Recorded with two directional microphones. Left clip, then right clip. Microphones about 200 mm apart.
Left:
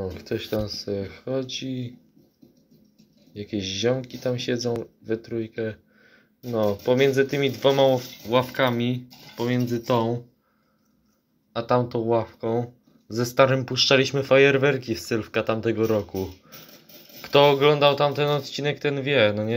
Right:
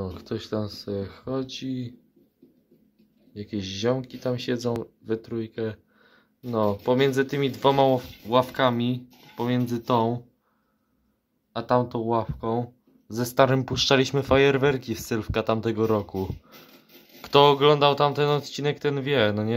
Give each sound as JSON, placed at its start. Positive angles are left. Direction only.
{"t": 0.0, "sound": "speech", "side_deg": -15}
{"t": 3.3, "sound": "speech", "side_deg": -10}
{"t": 11.5, "sound": "speech", "side_deg": -10}